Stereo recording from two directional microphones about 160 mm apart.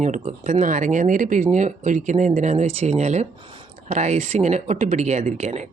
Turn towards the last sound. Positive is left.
turn(degrees=-45)  # may be behind; listen again after turning